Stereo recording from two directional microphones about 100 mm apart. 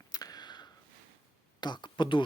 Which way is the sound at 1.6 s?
50° left (ahead or behind).